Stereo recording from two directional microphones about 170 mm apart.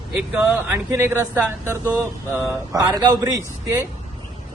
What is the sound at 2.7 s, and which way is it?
A man's voice, 20° right (ahead or behind).